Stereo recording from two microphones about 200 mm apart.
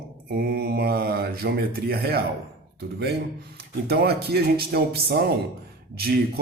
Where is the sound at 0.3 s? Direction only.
55° right (ahead or behind).